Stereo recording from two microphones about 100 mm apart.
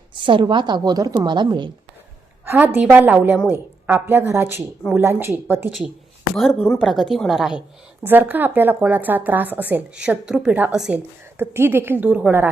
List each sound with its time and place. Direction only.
0.1 s a woman's voice: 55° right (ahead or behind)
2.4 s a woman's voice: 20° right (ahead or behind)
6.6 s a woman's voice: centre (ahead or behind)
8.0 s a woman's voice: 20° right (ahead or behind)
11.3 s a woman's voice: 25° right (ahead or behind)